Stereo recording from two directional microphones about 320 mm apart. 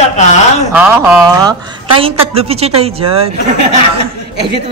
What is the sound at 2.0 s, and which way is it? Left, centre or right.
A woman's voice, centre.